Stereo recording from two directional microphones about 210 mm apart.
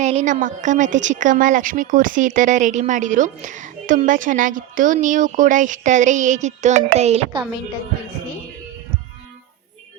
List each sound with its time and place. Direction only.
0.0 s a woman's voice: 30° right (ahead or behind)